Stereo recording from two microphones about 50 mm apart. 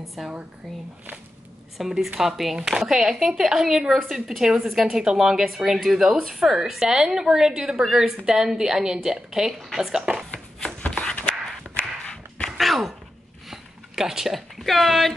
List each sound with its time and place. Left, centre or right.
0.2 s a woman's voice: centre
1.8 s a woman's voice: centre
11.1 s a sound: left
12.4 s thunk: centre
13.5 s a sound: centre
14.6 s speech: centre